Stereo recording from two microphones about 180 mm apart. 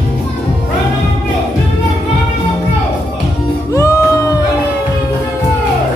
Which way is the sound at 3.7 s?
15° left (ahead or behind).